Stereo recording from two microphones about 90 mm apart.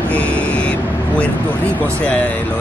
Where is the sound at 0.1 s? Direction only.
15° left (ahead or behind).